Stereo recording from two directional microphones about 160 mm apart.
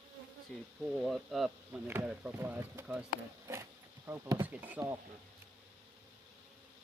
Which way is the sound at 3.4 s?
20° right (ahead or behind).